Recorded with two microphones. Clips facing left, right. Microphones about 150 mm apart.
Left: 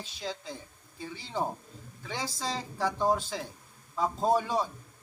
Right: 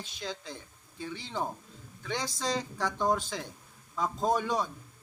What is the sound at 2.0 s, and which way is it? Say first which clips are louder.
Speech: right 2 dB; 5° left (ahead or behind).